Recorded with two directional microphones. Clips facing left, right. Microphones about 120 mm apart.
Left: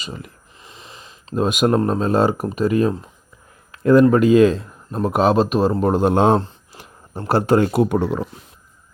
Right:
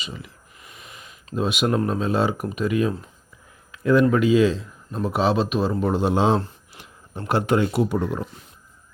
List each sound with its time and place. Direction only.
0.0 s speech: 45° left (ahead or behind)
0.6 s sniff: 30° left (ahead or behind)
1.4 s speech: 45° left (ahead or behind)
3.7 s a sound: 40° left (ahead or behind)
4.1 s speech: 45° left (ahead or behind)
6.4 s speech: 35° left (ahead or behind); by 8.2 s 85° left